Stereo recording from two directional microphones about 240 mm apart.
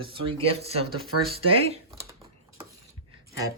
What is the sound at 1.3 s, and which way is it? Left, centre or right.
Speech, right.